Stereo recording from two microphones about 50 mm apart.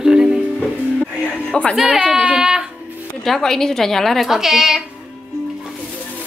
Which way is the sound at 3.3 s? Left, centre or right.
Centre.